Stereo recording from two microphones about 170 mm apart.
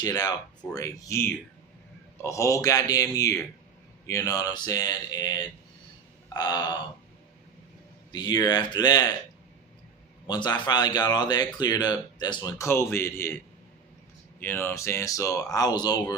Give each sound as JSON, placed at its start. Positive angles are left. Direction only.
{"t": 0.0, "sound": "speech", "side_deg": 20}
{"t": 8.1, "sound": "speech", "side_deg": 25}
{"t": 10.2, "sound": "speech", "side_deg": 25}
{"t": 14.4, "sound": "speech", "side_deg": 10}